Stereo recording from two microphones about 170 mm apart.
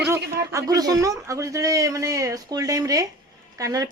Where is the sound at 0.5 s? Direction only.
20° right (ahead or behind).